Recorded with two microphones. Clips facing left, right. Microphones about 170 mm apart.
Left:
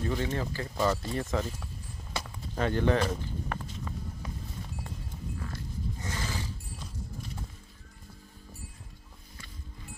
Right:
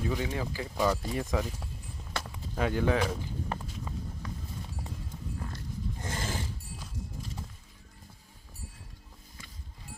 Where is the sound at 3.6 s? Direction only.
10° right (ahead or behind).